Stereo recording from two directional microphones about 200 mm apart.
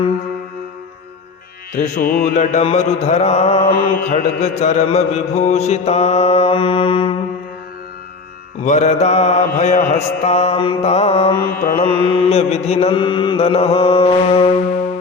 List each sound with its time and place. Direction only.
1.7 s mantra: 40° left (ahead or behind)
8.6 s mantra: 35° left (ahead or behind)
11.5 s mantra: 45° left (ahead or behind)
11.8 s mantra: 25° left (ahead or behind)